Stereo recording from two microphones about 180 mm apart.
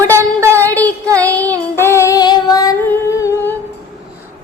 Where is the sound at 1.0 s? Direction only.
15° right (ahead or behind).